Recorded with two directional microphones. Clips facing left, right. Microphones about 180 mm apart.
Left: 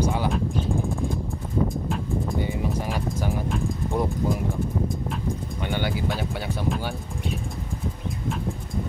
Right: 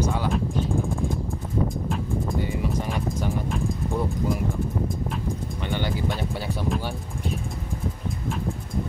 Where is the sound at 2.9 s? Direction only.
Centre (ahead or behind).